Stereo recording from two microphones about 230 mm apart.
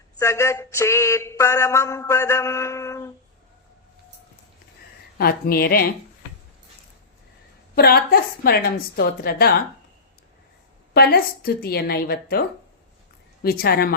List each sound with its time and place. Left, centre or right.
0.2 s a sound: centre
5.1 s a woman's voice: left
7.8 s a woman's voice: left
10.9 s a woman's voice: left
13.4 s a woman's voice: left